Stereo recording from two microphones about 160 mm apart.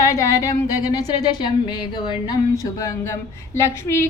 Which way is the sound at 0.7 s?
25° left (ahead or behind).